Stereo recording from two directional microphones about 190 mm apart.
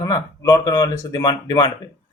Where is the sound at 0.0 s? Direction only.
20° left (ahead or behind).